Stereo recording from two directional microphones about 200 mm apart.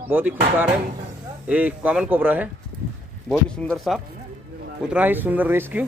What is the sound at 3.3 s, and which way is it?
Speech, 5° left (ahead or behind).